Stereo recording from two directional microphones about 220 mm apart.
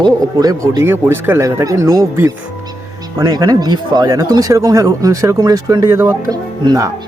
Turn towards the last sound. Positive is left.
turn(degrees=-15)  # may be behind; listen again after turning